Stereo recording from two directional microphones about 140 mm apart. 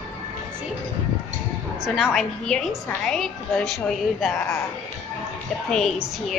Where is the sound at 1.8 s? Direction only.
5° right (ahead or behind).